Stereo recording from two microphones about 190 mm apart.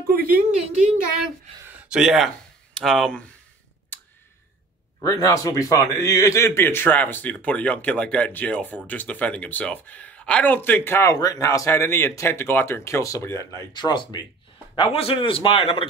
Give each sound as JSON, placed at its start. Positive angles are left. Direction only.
{"t": 0.1, "sound": "a woman's voice", "side_deg": -50}
{"t": 1.9, "sound": "speech", "side_deg": 0}
{"t": 5.0, "sound": "a man's voice", "side_deg": 20}